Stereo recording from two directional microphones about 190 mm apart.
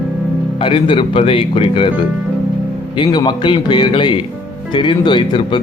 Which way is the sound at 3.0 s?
25° left (ahead or behind).